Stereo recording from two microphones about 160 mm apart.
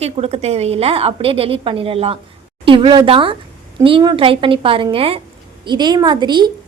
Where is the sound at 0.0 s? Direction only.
40° right (ahead or behind).